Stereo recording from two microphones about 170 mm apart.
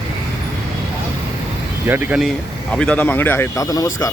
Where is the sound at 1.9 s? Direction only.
10° right (ahead or behind).